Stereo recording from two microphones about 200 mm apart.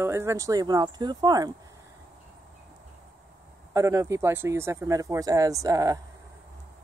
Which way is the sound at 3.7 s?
15° right (ahead or behind).